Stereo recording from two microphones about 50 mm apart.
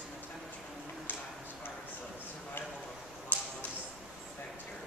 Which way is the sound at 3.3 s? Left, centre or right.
Left.